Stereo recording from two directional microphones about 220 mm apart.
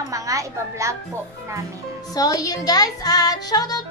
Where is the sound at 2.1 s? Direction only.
15° left (ahead or behind).